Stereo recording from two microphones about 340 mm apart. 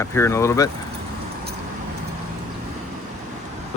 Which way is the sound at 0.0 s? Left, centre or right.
Centre.